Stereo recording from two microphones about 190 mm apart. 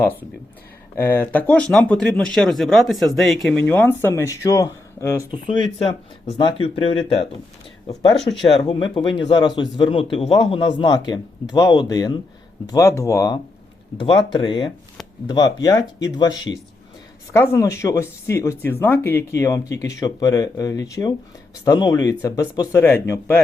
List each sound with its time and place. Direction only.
0.9 s speech: 10° left (ahead or behind); by 7.3 s 25° left (ahead or behind)
8.2 s speech: centre (ahead or behind)
8.4 s speech: 25° left (ahead or behind)